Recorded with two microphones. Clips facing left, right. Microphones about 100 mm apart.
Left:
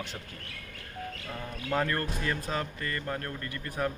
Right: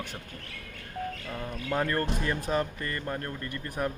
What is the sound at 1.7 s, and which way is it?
Speech, 20° right (ahead or behind).